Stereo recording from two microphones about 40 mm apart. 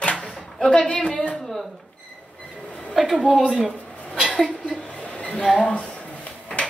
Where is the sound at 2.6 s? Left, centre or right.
Left.